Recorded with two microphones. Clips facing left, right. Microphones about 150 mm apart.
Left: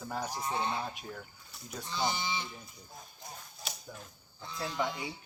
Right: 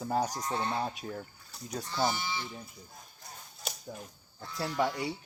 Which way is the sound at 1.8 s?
20° left (ahead or behind).